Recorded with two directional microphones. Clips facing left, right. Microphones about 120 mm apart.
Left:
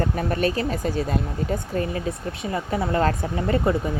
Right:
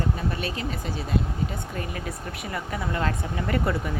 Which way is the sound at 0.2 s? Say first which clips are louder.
Left 7 dB; 50° left (ahead or behind).